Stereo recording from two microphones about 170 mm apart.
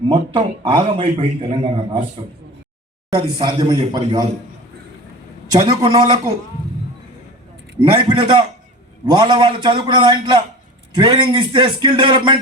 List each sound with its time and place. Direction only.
0.1 s a man's voice: 30° right (ahead or behind)
3.1 s a man's voice: 30° right (ahead or behind)
5.5 s a man's voice: 25° right (ahead or behind)
7.8 s a man's voice: 30° right (ahead or behind)